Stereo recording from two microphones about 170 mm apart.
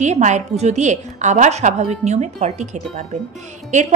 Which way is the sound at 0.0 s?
45° right (ahead or behind).